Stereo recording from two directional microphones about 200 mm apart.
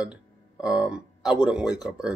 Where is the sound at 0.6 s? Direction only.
5° right (ahead or behind).